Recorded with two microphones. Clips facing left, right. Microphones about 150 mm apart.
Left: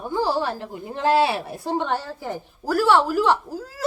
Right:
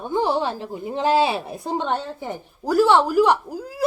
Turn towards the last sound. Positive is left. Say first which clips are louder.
# right 1 dB
turn(degrees=-15)  # may be behind; listen again after turning